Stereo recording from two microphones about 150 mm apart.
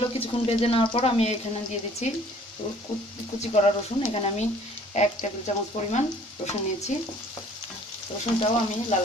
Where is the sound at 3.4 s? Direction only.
45° left (ahead or behind).